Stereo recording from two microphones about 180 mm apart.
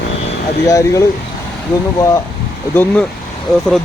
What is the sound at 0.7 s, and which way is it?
Speech, 20° left (ahead or behind).